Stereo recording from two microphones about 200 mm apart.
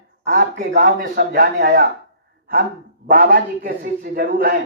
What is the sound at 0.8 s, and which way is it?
Speech, 40° right (ahead or behind).